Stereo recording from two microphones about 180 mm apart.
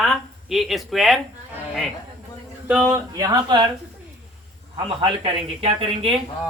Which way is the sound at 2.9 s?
20° right (ahead or behind).